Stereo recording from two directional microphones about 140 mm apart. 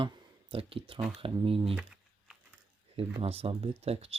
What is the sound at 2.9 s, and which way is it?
Speech, 45° right (ahead or behind).